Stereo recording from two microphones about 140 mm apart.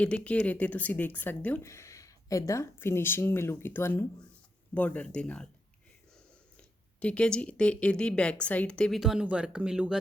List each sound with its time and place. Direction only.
0.0 s speech: 10° left (ahead or behind)
1.6 s speech: 20° left (ahead or behind)
6.6 s speech: 10° left (ahead or behind)